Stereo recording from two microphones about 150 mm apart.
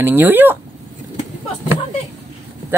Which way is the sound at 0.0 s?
15° right (ahead or behind).